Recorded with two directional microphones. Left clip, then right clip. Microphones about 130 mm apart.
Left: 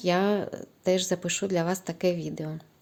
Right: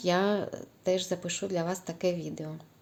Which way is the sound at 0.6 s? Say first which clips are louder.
Left 3 dB; 30° left (ahead or behind).